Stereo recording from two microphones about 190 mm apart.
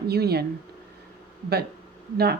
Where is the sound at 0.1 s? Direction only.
55° right (ahead or behind).